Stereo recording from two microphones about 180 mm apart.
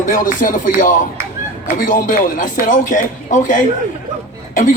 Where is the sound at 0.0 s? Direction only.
50° left (ahead or behind).